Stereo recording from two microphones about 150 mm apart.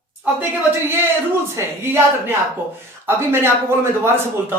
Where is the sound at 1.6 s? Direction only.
15° right (ahead or behind).